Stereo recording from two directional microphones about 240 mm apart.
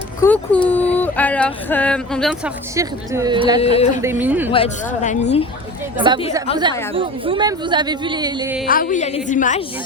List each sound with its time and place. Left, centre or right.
0.2 s speech: centre
2.7 s a woman's voice: centre
3.6 s a woman's voice: left
4.0 s a woman's voice: centre
4.5 s a woman's voice: left
6.0 s speech: centre
8.6 s a woman's voice: left